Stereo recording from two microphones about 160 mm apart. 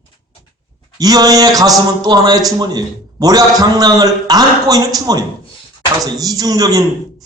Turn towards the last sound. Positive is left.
turn(degrees=-20)  # may be behind; listen again after turning